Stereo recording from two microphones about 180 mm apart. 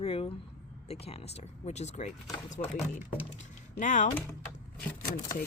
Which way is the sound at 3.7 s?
45° left (ahead or behind).